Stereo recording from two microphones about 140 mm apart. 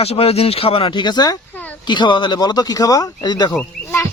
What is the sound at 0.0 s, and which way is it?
Speech, 45° left (ahead or behind).